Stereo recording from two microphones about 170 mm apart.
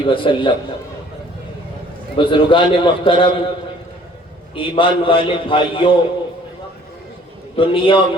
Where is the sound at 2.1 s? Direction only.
30° left (ahead or behind).